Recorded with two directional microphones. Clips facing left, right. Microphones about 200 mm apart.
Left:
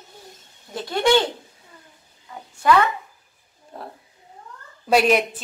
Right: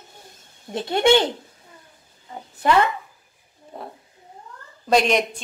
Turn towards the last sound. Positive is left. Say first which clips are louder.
# left 1 dB
turn(degrees=5)  # may be behind; listen again after turning